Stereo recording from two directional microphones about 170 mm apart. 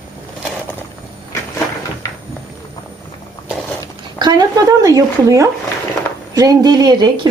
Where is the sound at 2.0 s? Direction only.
20° left (ahead or behind).